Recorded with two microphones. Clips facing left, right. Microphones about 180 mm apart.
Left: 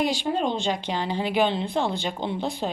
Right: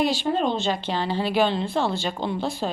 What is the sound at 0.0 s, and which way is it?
A woman's voice, 15° left (ahead or behind).